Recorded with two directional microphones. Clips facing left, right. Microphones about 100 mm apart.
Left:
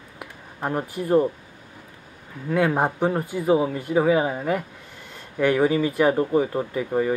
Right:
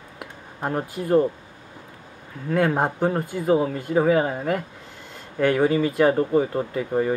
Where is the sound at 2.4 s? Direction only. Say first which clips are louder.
Even; 5° left (ahead or behind).